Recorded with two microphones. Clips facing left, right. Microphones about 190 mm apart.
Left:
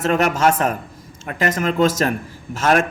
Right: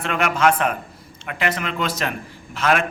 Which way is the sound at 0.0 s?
40° left (ahead or behind).